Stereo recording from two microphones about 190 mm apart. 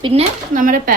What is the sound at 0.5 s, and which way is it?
Speech, 45° right (ahead or behind).